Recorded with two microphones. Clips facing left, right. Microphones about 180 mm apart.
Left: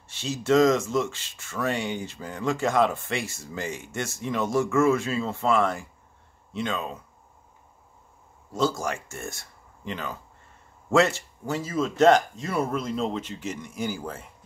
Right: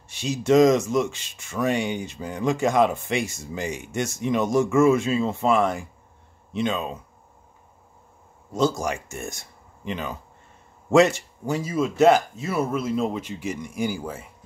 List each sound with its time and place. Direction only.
0.1 s speech: 15° right (ahead or behind)
8.5 s speech: 20° right (ahead or behind)